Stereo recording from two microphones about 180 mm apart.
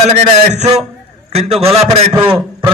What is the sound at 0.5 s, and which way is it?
A man's voice, 40° right (ahead or behind).